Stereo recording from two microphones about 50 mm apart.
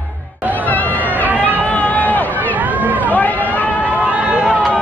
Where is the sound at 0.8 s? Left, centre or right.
Right.